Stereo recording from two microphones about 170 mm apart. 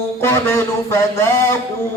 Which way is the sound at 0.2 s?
15° left (ahead or behind).